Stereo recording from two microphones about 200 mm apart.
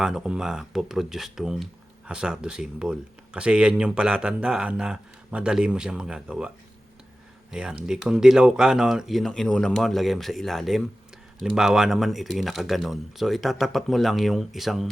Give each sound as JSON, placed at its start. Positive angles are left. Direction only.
{"t": 0.0, "sound": "speech", "side_deg": -5}
{"t": 7.5, "sound": "speech", "side_deg": -5}